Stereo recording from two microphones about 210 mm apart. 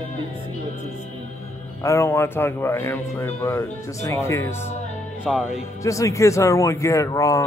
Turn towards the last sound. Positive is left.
turn(degrees=15)  # may be behind; listen again after turning